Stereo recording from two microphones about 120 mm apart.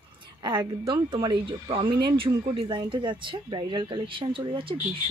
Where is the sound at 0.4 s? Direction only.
40° right (ahead or behind).